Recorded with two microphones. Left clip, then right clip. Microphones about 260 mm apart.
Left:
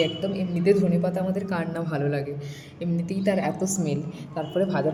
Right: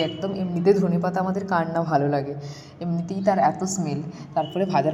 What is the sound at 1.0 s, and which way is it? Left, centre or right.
Speech, centre.